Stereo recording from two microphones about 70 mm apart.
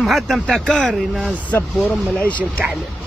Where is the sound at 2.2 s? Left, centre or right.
Centre.